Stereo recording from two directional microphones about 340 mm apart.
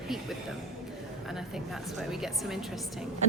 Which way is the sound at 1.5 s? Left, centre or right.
Centre.